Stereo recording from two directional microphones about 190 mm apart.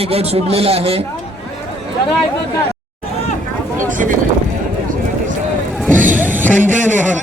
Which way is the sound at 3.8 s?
45° right (ahead or behind).